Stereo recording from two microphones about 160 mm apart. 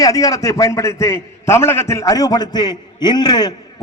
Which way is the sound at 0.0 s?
20° left (ahead or behind).